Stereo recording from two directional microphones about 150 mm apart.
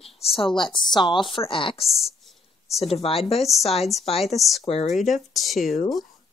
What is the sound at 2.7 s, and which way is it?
Speech, 45° left (ahead or behind).